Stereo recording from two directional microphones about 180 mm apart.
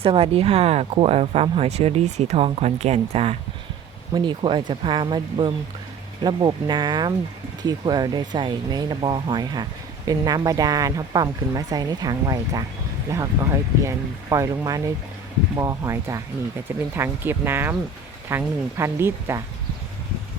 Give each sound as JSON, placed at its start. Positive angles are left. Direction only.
{"t": 0.0, "sound": "speech", "side_deg": -30}
{"t": 4.1, "sound": "a woman's voice", "side_deg": -25}